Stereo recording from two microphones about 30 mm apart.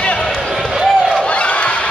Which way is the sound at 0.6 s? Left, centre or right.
Centre.